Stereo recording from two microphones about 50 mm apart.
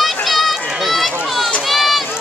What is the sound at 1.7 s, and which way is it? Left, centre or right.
Run, centre.